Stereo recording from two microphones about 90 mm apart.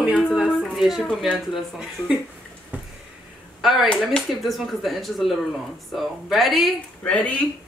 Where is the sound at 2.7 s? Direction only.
20° right (ahead or behind).